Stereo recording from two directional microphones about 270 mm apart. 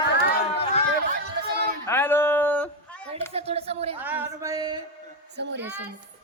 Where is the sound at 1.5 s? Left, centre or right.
Right.